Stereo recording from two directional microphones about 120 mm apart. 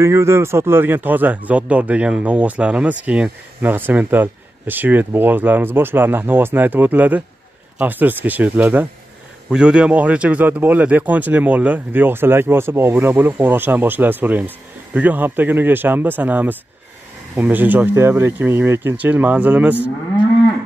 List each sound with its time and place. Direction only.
0.0 s speech: 25° right (ahead or behind)